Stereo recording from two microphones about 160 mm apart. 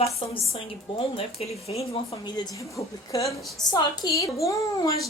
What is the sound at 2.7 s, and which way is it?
Speech, 20° left (ahead or behind).